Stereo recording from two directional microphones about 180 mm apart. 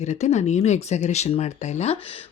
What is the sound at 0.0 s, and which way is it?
Speech, 40° left (ahead or behind).